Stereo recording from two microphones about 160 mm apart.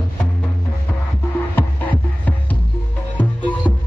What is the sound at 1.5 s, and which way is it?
Music, 10° left (ahead or behind).